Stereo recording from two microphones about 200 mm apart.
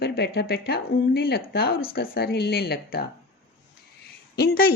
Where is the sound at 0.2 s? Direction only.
55° left (ahead or behind).